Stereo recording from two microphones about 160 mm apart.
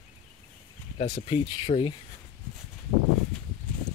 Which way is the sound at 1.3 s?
35° left (ahead or behind).